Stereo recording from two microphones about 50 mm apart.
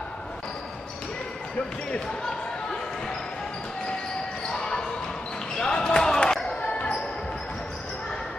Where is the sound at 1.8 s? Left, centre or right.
Centre.